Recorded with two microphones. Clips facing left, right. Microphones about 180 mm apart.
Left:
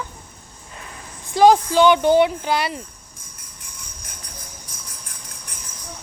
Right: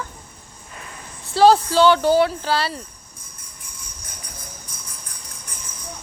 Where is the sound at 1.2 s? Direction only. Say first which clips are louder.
Even; 15° left (ahead or behind).